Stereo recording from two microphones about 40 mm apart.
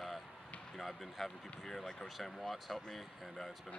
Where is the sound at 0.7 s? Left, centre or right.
Centre.